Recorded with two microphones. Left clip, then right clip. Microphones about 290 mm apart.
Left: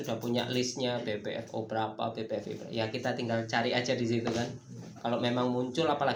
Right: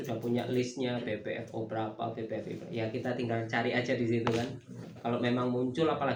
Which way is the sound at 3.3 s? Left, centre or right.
Left.